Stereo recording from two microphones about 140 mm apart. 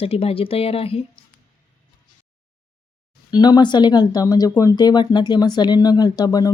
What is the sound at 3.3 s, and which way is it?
Speech, 30° left (ahead or behind).